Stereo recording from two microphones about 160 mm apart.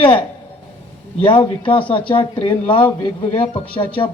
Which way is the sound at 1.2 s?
35° left (ahead or behind).